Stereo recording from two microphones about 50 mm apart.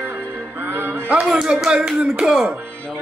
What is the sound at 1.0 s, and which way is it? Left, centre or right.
Speech, right.